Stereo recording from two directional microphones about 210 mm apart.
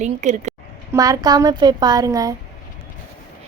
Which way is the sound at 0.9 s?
15° right (ahead or behind).